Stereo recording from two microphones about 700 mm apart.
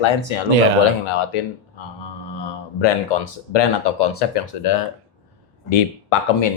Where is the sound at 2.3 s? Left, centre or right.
Left.